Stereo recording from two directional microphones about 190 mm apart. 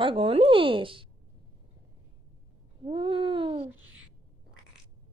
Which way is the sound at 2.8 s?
25° right (ahead or behind).